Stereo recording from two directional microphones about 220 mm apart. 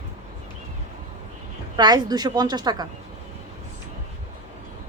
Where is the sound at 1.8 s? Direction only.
20° right (ahead or behind).